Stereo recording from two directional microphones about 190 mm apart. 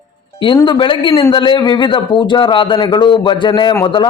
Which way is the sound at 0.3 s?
25° left (ahead or behind).